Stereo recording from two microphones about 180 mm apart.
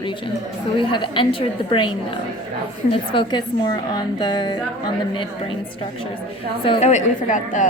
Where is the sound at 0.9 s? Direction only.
25° left (ahead or behind).